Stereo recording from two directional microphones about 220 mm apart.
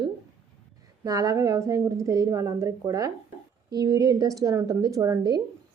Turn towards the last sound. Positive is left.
turn(degrees=-15)  # may be behind; listen again after turning